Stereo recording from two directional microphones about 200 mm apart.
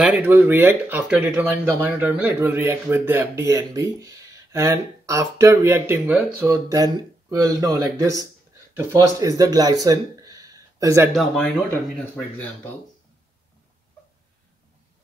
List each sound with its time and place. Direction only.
0.0 s speech: 5° right (ahead or behind)
11.1 s speech: 5° left (ahead or behind)